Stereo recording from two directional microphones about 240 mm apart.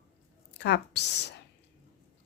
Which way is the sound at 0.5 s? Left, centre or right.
Left.